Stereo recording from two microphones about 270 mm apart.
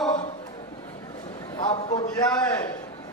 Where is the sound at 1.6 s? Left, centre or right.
Centre.